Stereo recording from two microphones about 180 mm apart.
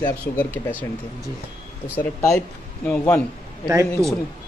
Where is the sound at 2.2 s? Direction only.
5° left (ahead or behind).